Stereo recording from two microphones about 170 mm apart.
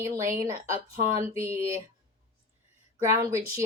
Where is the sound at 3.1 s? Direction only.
15° right (ahead or behind).